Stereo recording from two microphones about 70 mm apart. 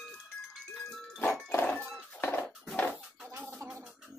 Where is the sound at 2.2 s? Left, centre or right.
Left.